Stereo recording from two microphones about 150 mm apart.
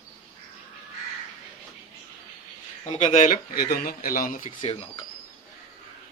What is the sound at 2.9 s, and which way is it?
Speech, 55° left (ahead or behind).